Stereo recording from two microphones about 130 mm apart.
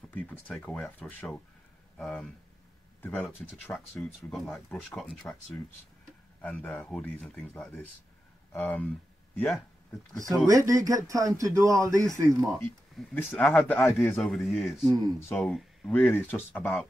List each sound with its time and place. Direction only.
0.1 s speech: 10° left (ahead or behind)
4.0 s speech: 5° left (ahead or behind)
10.1 s speech: 25° right (ahead or behind)
13.1 s speech: 15° left (ahead or behind)
14.0 s speech: 5° left (ahead or behind)
14.9 s speech: 30° right (ahead or behind)
15.1 s speech: 20° left (ahead or behind)
15.4 s speech: centre (ahead or behind)
15.9 s speech: 15° left (ahead or behind)